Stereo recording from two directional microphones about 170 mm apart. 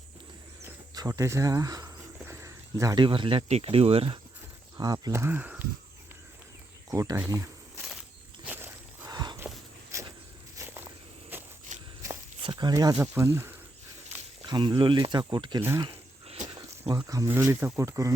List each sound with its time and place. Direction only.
0.6 s speech: 20° right (ahead or behind)
4.8 s speech: 20° right (ahead or behind)
6.9 s speech: 20° right (ahead or behind)
8.4 s walk: 15° right (ahead or behind)
9.1 s a sound: 25° right (ahead or behind)
9.9 s walk: 15° right (ahead or behind)
11.7 s walk: 45° right (ahead or behind)
12.4 s speech: 25° right (ahead or behind)
15.6 s speech: 15° right (ahead or behind)
15.9 s a sound: 35° right (ahead or behind)
16.9 s speech: 20° right (ahead or behind)